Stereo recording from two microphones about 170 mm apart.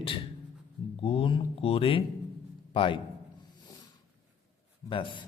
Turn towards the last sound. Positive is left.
turn(degrees=30)  # may be behind; listen again after turning